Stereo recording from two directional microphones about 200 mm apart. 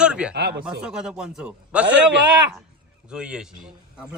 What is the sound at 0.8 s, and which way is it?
A man's voice, 5° right (ahead or behind).